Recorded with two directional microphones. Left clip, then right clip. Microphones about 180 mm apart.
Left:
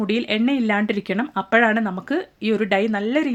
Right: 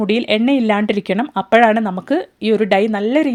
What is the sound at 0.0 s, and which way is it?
Speech, 35° right (ahead or behind).